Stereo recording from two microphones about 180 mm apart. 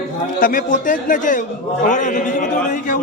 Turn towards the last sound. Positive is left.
turn(degrees=45)  # may be behind; listen again after turning